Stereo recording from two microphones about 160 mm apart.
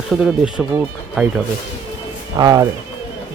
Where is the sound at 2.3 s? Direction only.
25° right (ahead or behind).